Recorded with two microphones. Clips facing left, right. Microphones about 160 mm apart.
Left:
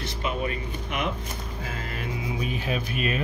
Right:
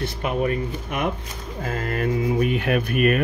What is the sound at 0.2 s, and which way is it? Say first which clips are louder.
Speech: right 6 dB; 50° right (ahead or behind).